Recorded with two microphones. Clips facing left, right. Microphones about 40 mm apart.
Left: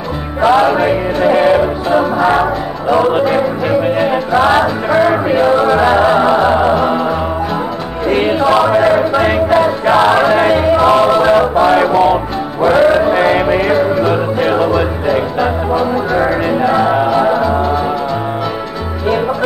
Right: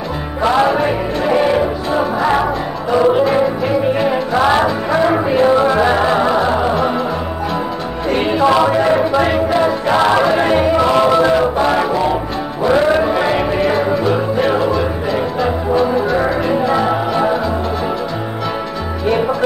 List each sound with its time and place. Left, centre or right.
0.4 s music: centre
8.1 s music: centre